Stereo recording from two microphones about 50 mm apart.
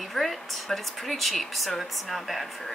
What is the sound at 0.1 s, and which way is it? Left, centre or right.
Speech, centre.